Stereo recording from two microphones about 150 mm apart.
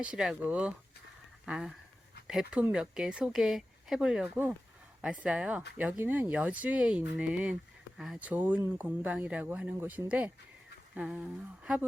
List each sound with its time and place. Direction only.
0.0 s speech: 5° right (ahead or behind)